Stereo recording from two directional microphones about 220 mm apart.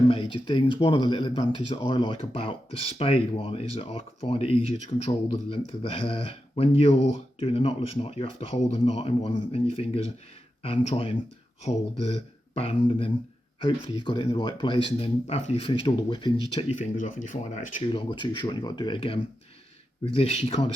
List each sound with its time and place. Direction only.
0.1 s speech: 20° left (ahead or behind)
16.7 s speech: 35° left (ahead or behind)